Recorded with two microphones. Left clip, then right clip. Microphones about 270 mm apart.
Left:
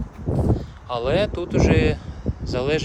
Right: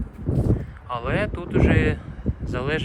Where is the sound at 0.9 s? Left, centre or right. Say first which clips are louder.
Left 4 dB; centre.